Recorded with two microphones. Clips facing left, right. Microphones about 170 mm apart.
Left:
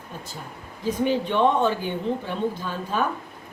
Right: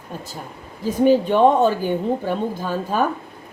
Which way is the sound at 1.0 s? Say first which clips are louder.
Right 7 dB; 40° right (ahead or behind).